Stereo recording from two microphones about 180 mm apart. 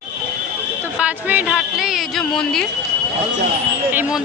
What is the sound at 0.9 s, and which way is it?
Speech, 5° right (ahead or behind).